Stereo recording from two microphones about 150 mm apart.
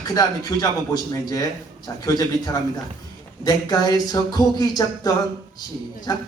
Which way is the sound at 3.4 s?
25° left (ahead or behind).